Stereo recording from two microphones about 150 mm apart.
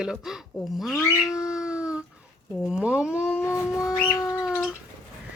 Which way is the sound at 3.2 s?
15° left (ahead or behind).